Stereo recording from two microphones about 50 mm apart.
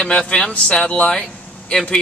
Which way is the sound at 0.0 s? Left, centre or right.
Centre.